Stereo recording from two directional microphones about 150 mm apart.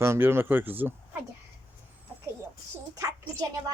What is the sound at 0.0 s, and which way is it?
Speech, 15° right (ahead or behind).